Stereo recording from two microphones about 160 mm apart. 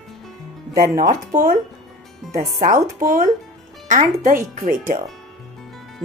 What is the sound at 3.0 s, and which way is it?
A woman's voice, 60° right (ahead or behind).